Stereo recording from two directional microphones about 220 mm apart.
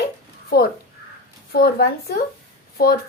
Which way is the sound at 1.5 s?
45° left (ahead or behind).